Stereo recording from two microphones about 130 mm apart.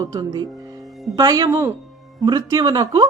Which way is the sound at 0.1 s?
30° right (ahead or behind).